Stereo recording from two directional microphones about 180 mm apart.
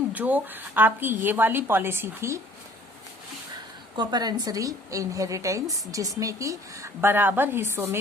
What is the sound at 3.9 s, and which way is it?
A woman's voice, 25° right (ahead or behind).